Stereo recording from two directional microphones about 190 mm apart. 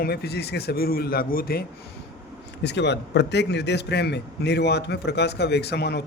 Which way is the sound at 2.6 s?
65° left (ahead or behind).